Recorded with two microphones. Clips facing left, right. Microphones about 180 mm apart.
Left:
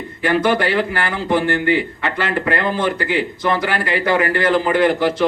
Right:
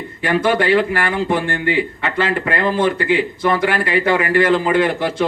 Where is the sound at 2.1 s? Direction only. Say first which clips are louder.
Right 1 dB; 25° right (ahead or behind).